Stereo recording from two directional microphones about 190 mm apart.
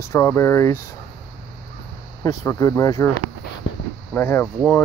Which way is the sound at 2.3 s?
15° left (ahead or behind).